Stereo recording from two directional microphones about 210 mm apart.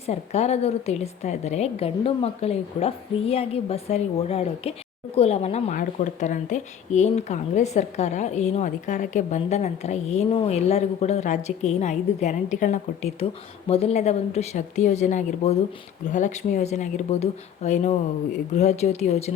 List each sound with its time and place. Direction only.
0.0 s a woman's voice: 30° left (ahead or behind)